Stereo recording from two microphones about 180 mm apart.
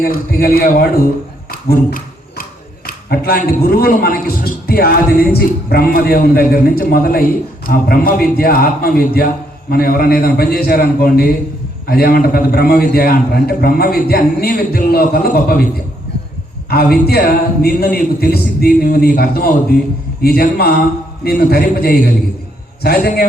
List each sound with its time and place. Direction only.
0.0 s a man's voice: 55° left (ahead or behind)
1.5 s a sound: 55° left (ahead or behind)
2.4 s a man's voice: 55° left (ahead or behind)
16.6 s a man's voice: 60° left (ahead or behind)